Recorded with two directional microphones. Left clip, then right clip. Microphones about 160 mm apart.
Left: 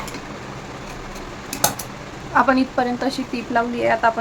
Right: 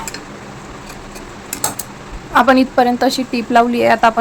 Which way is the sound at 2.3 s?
50° right (ahead or behind).